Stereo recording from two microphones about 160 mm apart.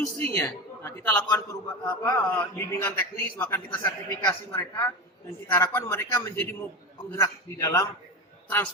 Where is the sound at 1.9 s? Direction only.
15° left (ahead or behind).